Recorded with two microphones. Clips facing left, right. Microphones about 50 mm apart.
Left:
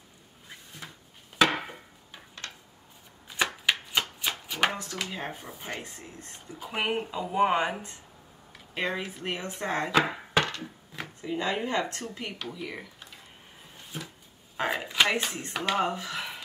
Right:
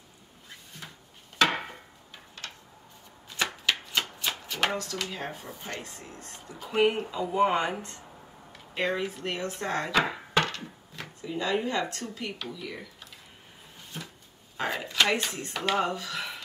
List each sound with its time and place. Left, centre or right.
3.3 s chopping: centre
4.7 s speech: centre
9.9 s chopping: centre
11.0 s speech: left
13.9 s a sound: centre
14.6 s a sound: centre
15.8 s speech: centre